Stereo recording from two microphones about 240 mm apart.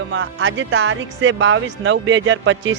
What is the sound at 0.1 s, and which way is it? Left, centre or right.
Speech, right.